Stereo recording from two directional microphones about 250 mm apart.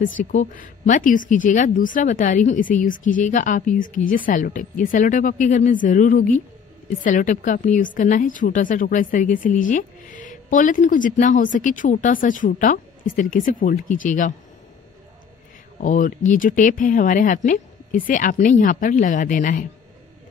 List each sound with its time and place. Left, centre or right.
0.2 s a woman's voice: left
15.8 s a woman's voice: left